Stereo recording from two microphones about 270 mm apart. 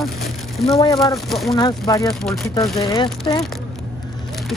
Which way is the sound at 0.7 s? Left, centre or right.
Centre.